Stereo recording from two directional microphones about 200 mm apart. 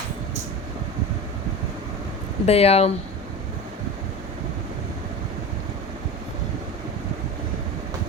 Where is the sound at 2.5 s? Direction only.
30° left (ahead or behind).